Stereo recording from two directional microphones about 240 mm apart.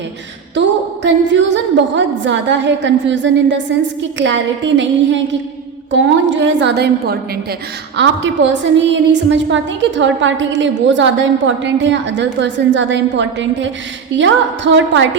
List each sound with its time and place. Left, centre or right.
1.0 s a woman's voice: right